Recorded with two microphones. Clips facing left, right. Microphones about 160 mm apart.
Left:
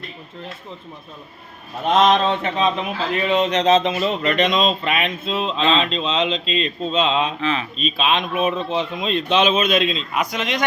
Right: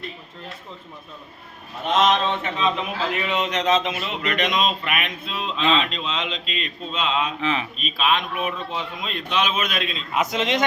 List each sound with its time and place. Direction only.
1.9 s speech: 35° left (ahead or behind)
7.4 s speech: 15° right (ahead or behind)
7.8 s speech: 25° left (ahead or behind)
10.2 s a man's voice: 25° right (ahead or behind)